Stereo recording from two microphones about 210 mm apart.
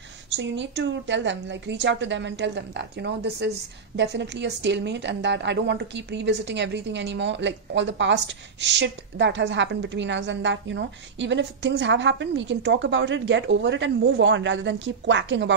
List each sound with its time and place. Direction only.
0.4 s a woman's voice: 60° right (ahead or behind)